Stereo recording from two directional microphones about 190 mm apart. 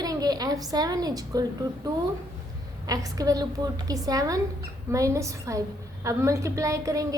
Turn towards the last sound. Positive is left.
turn(degrees=-15)  # may be behind; listen again after turning